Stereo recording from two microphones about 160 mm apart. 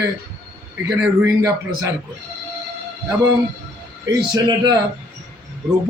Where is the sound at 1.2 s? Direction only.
20° right (ahead or behind).